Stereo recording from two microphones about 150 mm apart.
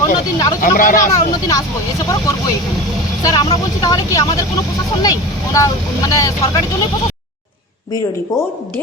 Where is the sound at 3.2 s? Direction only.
25° left (ahead or behind).